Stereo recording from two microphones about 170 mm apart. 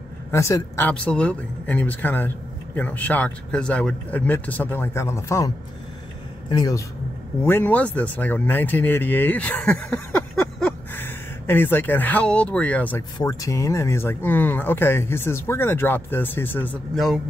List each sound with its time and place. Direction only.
0.3 s speech: 15° left (ahead or behind)
6.5 s a man's voice: 25° left (ahead or behind)
7.4 s speech: 10° left (ahead or behind)
13.2 s speech: 20° left (ahead or behind)
16.9 s speech: centre (ahead or behind)